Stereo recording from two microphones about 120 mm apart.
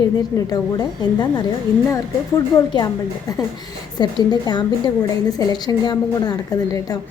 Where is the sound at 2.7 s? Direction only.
35° left (ahead or behind).